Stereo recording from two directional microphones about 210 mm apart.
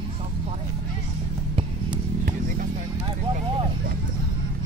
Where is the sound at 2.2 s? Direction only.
40° right (ahead or behind).